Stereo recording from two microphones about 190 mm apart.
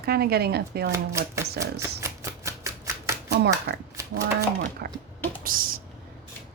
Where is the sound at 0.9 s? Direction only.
15° right (ahead or behind).